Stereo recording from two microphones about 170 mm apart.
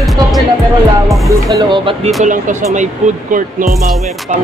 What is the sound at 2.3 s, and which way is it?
Speech, 45° right (ahead or behind).